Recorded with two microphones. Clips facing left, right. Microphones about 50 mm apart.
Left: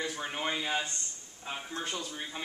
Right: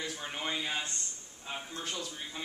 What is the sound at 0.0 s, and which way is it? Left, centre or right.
Speech, centre.